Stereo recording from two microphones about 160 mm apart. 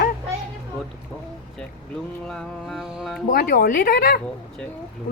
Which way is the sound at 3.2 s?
70° left (ahead or behind).